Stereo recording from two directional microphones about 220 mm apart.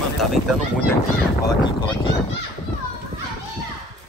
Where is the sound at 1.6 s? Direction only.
20° left (ahead or behind).